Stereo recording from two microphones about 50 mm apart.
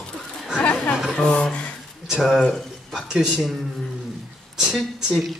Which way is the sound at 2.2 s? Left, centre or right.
Centre.